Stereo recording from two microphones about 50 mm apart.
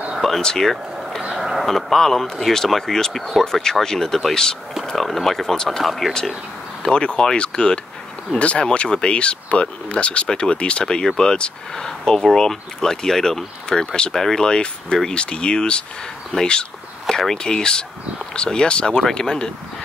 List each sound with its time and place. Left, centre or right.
0.2 s speech: centre
1.4 s speech: centre
6.8 s speech: centre